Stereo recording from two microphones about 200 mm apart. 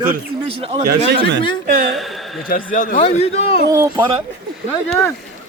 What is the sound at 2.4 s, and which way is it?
Speech, 45° left (ahead or behind).